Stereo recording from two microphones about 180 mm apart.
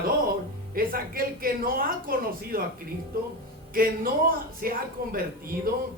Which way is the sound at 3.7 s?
55° right (ahead or behind).